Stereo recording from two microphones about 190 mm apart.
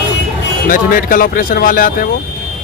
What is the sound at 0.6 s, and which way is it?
Speech, 45° left (ahead or behind).